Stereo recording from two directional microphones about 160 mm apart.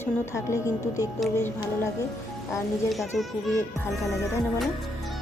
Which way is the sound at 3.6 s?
15° left (ahead or behind).